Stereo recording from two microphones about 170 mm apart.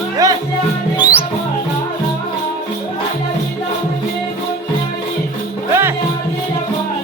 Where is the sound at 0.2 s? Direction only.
20° right (ahead or behind).